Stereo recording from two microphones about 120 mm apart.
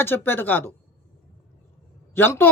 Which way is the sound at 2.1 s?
20° left (ahead or behind).